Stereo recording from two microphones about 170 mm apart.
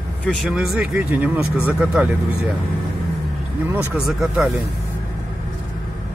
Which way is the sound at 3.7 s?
Centre (ahead or behind).